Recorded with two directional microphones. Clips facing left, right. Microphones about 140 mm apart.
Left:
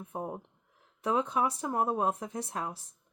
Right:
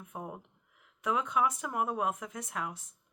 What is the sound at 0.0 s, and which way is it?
Speech, 30° left (ahead or behind).